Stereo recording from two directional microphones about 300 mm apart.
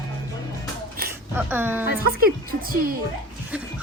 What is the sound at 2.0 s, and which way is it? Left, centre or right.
Speech, right.